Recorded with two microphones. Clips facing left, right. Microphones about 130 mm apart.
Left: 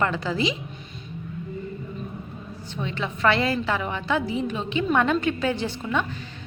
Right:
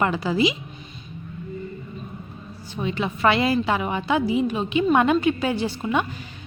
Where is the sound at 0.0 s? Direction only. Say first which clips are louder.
Right 3 dB; 10° right (ahead or behind).